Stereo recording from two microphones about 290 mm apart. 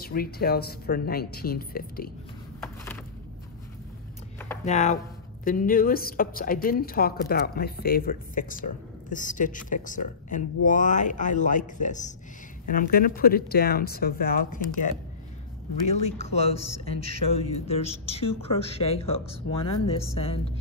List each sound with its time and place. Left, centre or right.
0.0 s a woman's voice: left
2.6 s a sound: centre
4.6 s a woman's voice: left
15.9 s speech: left